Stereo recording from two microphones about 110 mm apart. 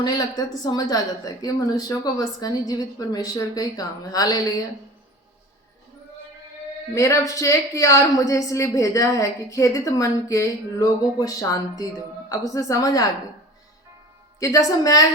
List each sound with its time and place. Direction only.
0.0 s a woman's voice: 35° left (ahead or behind)
6.9 s a woman's voice: 30° left (ahead or behind)
14.3 s a woman's voice: 30° left (ahead or behind)